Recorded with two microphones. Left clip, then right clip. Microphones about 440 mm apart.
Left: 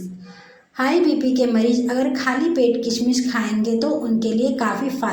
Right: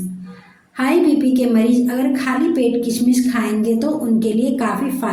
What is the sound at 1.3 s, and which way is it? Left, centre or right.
A woman's voice, right.